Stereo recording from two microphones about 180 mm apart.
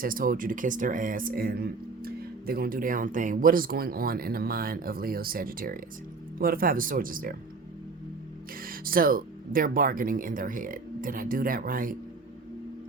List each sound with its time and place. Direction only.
0.0 s speech: 50° right (ahead or behind)
8.6 s speech: 55° right (ahead or behind)